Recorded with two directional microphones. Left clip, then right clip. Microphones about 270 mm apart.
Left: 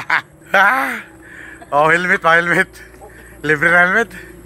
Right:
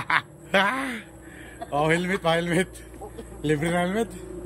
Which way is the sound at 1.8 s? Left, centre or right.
Centre.